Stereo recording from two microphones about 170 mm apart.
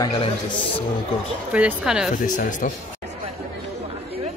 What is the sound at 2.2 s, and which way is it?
Speech, 50° left (ahead or behind).